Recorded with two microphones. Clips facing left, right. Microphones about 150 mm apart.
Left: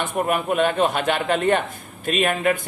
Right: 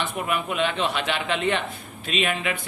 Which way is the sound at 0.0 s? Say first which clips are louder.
Left 5 dB; 45° left (ahead or behind).